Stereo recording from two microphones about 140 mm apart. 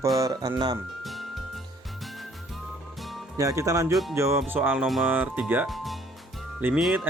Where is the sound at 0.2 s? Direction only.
25° right (ahead or behind).